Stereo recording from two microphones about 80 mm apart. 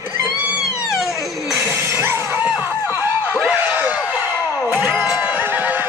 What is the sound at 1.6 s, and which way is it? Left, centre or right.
Shatter, right.